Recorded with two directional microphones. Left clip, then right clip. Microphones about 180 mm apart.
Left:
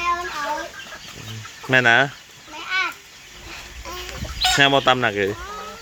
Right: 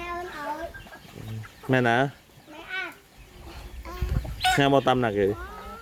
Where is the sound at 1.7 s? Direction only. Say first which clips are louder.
Left 7 dB; 25° right (ahead or behind).